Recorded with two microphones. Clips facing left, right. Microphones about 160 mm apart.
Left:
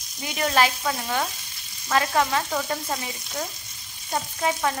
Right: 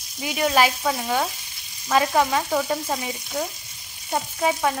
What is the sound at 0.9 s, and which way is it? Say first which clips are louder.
Frying: right 3 dB; 5° right (ahead or behind).